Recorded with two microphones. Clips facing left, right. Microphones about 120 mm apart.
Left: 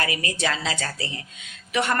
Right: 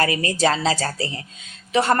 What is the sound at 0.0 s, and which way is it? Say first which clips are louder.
A woman's voice: right 7 dB; 35° right (ahead or behind).